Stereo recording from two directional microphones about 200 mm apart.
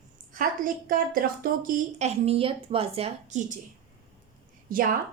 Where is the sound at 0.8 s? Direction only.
45° right (ahead or behind).